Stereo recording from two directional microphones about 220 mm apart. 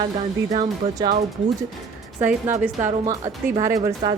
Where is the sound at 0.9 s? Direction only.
20° right (ahead or behind).